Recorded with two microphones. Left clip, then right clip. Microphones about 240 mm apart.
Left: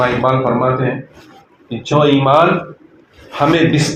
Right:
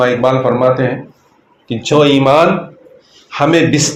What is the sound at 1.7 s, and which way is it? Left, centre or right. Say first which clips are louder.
A man's voice: right 3 dB; right.